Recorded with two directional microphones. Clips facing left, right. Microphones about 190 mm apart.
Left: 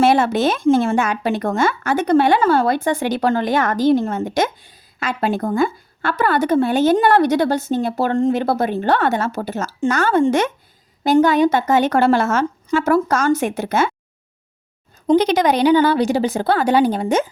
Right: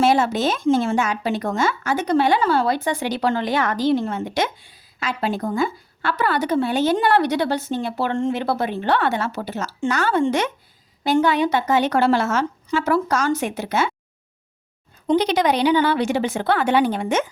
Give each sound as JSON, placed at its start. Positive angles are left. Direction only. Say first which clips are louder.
{"t": 0.0, "sound": "speech", "louder": "left 3 dB", "side_deg": 60}
{"t": 15.0, "sound": "speech", "louder": "left 4 dB", "side_deg": 45}